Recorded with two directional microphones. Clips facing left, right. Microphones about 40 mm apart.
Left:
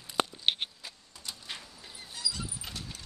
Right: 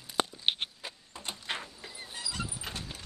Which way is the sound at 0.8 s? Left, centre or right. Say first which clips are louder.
Right 4 dB; right.